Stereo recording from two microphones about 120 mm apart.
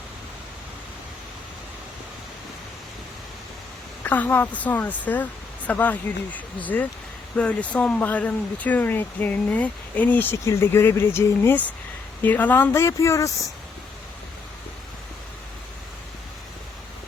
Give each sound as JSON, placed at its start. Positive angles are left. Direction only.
{"t": 4.0, "sound": "speech", "side_deg": 15}